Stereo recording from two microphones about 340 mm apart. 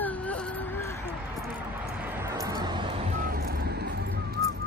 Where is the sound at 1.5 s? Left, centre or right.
Centre; by 4.5 s right.